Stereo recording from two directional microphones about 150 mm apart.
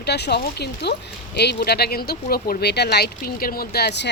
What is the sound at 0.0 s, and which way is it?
Speech, 90° left.